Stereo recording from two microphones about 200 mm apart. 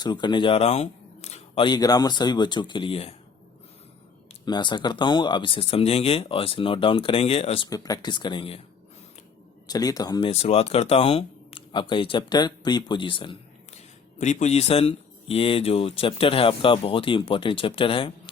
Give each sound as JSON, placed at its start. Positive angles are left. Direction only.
{"t": 0.0, "sound": "speech", "side_deg": 20}
{"t": 4.4, "sound": "speech", "side_deg": 20}
{"t": 9.6, "sound": "speech", "side_deg": 20}
{"t": 14.2, "sound": "speech", "side_deg": 35}